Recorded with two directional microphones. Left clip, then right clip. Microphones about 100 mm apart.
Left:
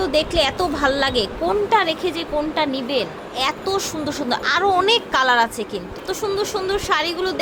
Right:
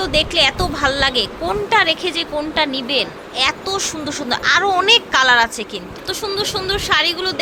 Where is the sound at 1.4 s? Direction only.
15° left (ahead or behind).